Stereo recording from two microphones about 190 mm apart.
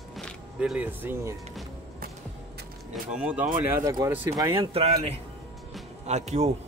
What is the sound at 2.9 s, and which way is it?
Speech, 5° right (ahead or behind).